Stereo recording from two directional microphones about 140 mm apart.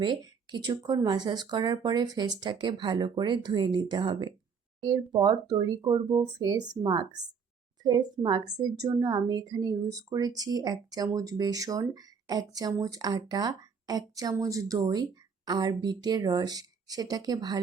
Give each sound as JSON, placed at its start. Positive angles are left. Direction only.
{"t": 0.0, "sound": "a woman's voice", "side_deg": -35}